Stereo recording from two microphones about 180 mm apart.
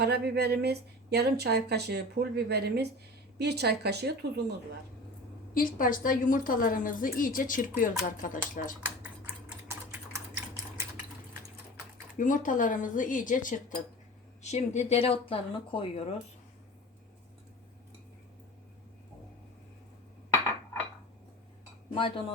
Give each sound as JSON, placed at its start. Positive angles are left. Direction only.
{"t": 0.0, "sound": "a woman's voice", "side_deg": -65}
{"t": 5.5, "sound": "a woman's voice", "side_deg": 50}
{"t": 10.3, "sound": "sewing machine", "side_deg": -15}
{"t": 12.1, "sound": "a woman's voice", "side_deg": 45}
{"t": 21.9, "sound": "speech", "side_deg": 30}